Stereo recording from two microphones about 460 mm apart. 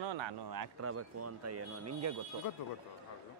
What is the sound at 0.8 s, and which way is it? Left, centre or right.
A man's voice, right.